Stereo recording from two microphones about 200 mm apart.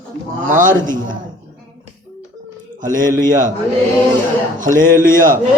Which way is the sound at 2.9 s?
40° right (ahead or behind).